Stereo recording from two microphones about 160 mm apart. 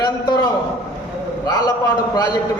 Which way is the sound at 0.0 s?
25° left (ahead or behind).